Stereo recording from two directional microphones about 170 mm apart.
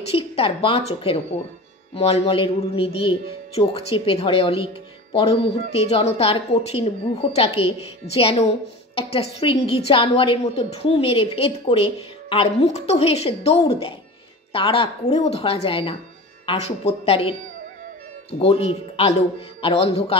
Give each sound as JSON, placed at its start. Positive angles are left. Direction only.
{"t": 0.1, "sound": "a woman's voice", "side_deg": 35}
{"t": 18.4, "sound": "a woman's voice", "side_deg": 35}